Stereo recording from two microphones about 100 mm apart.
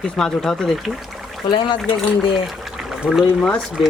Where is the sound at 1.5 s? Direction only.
50° left (ahead or behind).